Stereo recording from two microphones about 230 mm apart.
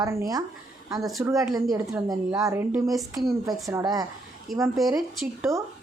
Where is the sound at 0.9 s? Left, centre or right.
Centre.